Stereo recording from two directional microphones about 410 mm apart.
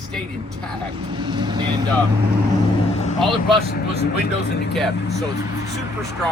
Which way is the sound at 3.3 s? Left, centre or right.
Centre.